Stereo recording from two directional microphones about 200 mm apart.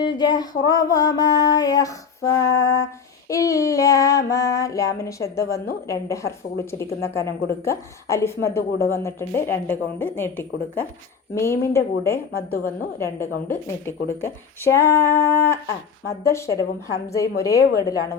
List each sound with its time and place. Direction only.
0.2 s child singing: 20° left (ahead or behind)
0.6 s female singing: 15° left (ahead or behind)
12.3 s a woman's voice: 45° left (ahead or behind)
13.0 s female singing: 10° left (ahead or behind)